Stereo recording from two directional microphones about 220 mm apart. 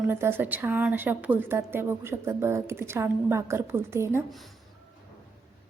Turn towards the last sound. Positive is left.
turn(degrees=-10)  # may be behind; listen again after turning